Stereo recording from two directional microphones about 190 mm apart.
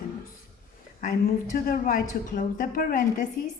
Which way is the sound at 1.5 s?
45° left (ahead or behind).